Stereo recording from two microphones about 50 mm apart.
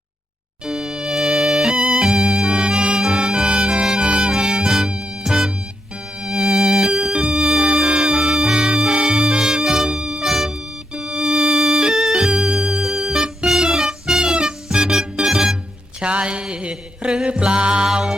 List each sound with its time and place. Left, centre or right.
0.6 s music: centre
4.3 s music: centre
10.9 s music: centre
16.0 s a sound: right
17.2 s music: centre